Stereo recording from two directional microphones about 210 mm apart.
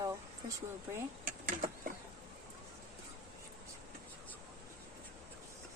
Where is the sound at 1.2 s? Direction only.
40° right (ahead or behind).